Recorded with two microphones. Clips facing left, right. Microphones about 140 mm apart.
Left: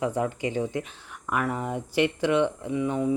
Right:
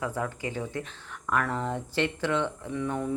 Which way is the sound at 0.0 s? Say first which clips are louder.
Left 5 dB; 20° left (ahead or behind).